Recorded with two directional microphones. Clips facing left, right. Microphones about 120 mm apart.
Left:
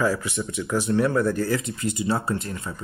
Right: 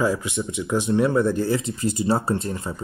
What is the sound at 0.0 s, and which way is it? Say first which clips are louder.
Speech: right 1 dB; 20° right (ahead or behind).